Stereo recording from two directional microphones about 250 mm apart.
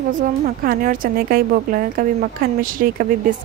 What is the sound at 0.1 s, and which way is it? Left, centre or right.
A woman's voice, right.